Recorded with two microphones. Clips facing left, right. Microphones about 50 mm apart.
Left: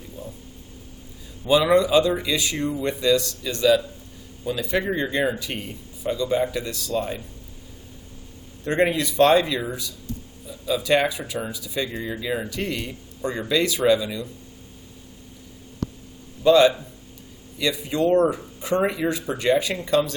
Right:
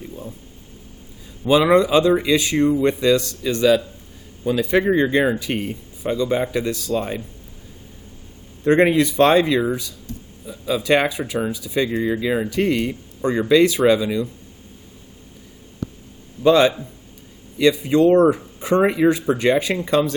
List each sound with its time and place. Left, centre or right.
1.5 s speech: right
8.6 s speech: right
10.7 s speech: right
16.4 s speech: right